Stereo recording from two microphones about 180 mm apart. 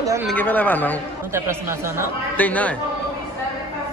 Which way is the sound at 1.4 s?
15° right (ahead or behind).